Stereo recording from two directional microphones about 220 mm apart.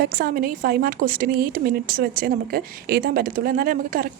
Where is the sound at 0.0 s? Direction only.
40° right (ahead or behind).